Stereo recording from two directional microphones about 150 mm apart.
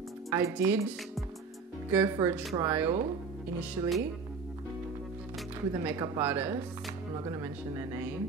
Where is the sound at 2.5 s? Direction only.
20° right (ahead or behind).